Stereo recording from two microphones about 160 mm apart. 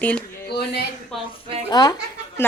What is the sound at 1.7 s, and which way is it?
Speech, 25° left (ahead or behind).